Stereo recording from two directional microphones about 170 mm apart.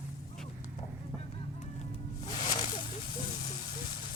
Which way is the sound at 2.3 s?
25° left (ahead or behind).